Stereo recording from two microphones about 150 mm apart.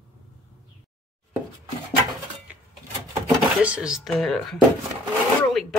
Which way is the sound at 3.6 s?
5° right (ahead or behind).